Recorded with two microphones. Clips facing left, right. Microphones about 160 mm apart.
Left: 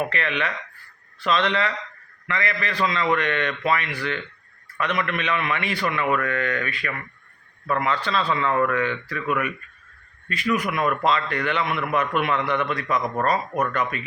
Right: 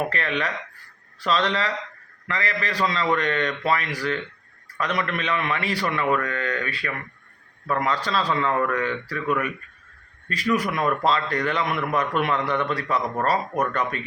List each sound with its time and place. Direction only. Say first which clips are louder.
0.1 s a man's voice: even; 35° right (ahead or behind)
10.5 s a man's voice: even; 35° right (ahead or behind)